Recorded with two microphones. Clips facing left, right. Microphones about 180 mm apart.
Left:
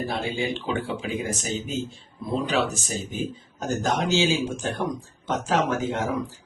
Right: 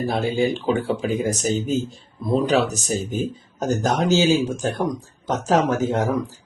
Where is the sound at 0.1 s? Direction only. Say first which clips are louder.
Right 6 dB; 40° right (ahead or behind).